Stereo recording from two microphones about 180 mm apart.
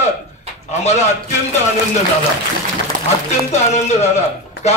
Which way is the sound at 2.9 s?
45° right (ahead or behind).